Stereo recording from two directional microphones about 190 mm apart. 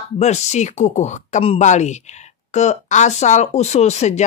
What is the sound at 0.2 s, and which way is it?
Speech, 35° left (ahead or behind).